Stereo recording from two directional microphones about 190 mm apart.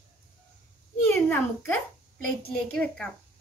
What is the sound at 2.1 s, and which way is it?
Speech, 5° left (ahead or behind).